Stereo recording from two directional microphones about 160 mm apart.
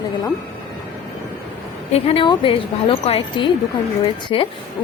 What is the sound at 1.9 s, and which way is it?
A woman's voice, 35° left (ahead or behind).